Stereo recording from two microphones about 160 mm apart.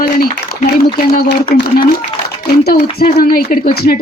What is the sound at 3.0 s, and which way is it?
Speech, 75° left (ahead or behind).